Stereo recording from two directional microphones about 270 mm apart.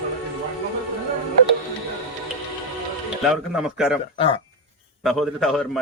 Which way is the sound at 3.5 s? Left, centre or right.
Centre.